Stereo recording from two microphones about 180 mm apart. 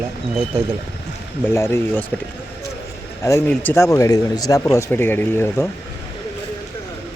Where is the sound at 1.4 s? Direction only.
15° left (ahead or behind).